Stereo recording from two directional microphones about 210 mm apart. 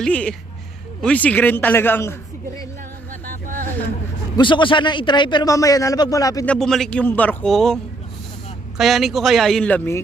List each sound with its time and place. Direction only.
0.0 s a man's voice: 5° left (ahead or behind)
3.1 s a sound: 40° right (ahead or behind)
4.4 s a man's voice: 20° left (ahead or behind)
6.5 s a man's voice: centre (ahead or behind)
8.8 s a man's voice: centre (ahead or behind)